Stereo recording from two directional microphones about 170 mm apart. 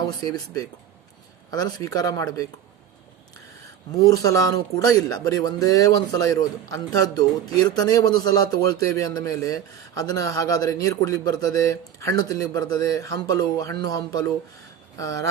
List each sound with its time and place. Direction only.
0.3 s speech: 20° left (ahead or behind)
3.6 s speech: 20° left (ahead or behind)